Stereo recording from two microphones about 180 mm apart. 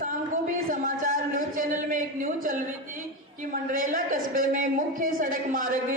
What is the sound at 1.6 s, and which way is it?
Speech, 50° right (ahead or behind).